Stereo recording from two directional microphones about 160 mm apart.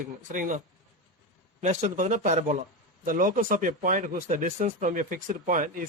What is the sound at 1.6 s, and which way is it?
Speech, 50° right (ahead or behind).